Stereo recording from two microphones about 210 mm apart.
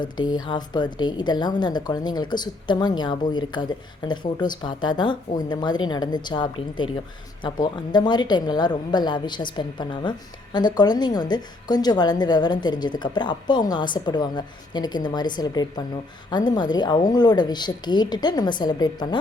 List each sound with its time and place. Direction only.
0.4 s a woman's voice: 20° left (ahead or behind)